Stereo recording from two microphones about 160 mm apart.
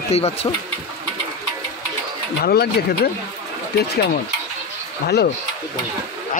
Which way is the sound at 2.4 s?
75° left (ahead or behind).